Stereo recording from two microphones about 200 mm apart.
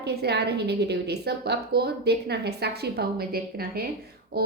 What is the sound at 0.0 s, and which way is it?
A woman's voice, 55° right (ahead or behind).